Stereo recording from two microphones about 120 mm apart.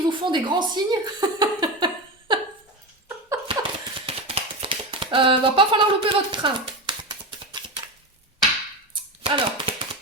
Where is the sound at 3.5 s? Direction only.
50° right (ahead or behind).